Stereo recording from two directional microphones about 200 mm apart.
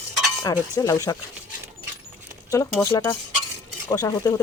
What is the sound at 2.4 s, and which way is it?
Speech, 15° left (ahead or behind).